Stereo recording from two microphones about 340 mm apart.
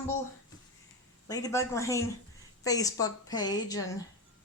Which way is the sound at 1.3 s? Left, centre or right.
Centre.